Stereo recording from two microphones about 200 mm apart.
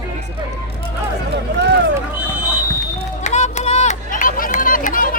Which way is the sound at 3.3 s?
35° left (ahead or behind).